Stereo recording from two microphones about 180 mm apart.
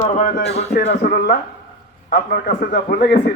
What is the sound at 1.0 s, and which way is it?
A man's voice, 55° left (ahead or behind).